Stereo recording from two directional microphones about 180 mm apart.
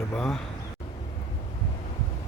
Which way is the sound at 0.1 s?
Centre (ahead or behind).